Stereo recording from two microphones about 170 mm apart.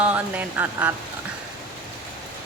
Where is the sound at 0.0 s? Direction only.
10° right (ahead or behind).